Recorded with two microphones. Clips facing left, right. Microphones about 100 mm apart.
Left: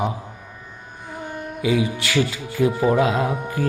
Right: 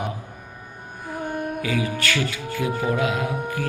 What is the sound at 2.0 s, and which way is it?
Speech, 25° left (ahead or behind).